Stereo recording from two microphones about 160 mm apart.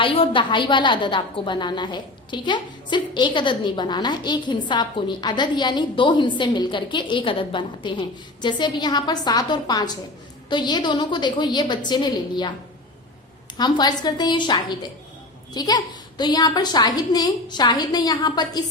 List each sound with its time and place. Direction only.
0.0 s a woman's voice: 35° left (ahead or behind)
13.6 s a woman's voice: 25° left (ahead or behind)